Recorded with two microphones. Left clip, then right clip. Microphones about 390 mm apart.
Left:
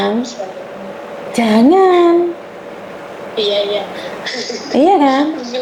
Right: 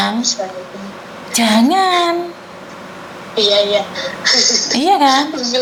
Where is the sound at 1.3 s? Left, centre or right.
Centre.